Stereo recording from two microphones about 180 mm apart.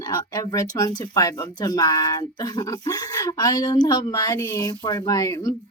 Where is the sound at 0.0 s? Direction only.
20° left (ahead or behind).